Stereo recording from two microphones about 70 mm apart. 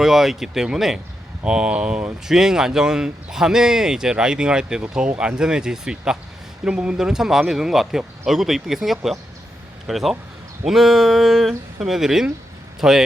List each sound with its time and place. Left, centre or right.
0.0 s speech: centre